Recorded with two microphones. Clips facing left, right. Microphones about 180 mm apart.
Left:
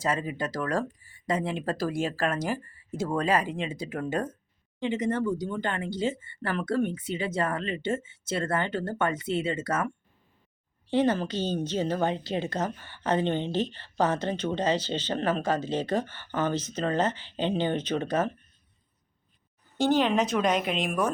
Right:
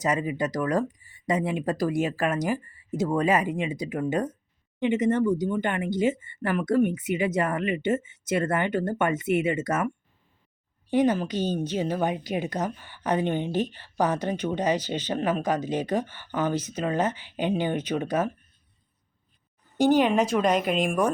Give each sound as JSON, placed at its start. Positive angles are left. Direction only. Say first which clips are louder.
{"t": 0.0, "sound": "a woman's voice", "louder": "right 3 dB", "side_deg": -15}
{"t": 10.8, "sound": "a woman's voice", "louder": "right 2 dB", "side_deg": -15}
{"t": 19.7, "sound": "a woman's voice", "louder": "right 3 dB", "side_deg": -15}
{"t": 20.3, "sound": "a woman's voice", "louder": "right 3 dB", "side_deg": 0}